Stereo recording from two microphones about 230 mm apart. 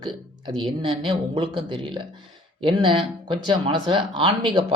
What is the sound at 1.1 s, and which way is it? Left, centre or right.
Speech, right.